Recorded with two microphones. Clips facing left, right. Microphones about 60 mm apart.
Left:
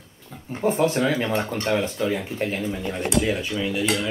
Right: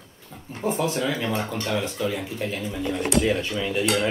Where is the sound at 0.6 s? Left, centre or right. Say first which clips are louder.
Left 4 dB; left.